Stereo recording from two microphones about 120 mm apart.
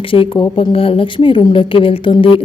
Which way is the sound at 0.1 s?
50° left (ahead or behind).